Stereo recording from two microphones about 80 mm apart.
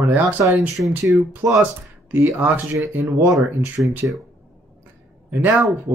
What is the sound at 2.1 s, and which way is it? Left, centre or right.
Speech, right.